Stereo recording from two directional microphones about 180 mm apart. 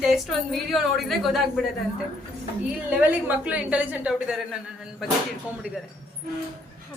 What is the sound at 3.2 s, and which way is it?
A woman's voice, 10° right (ahead or behind).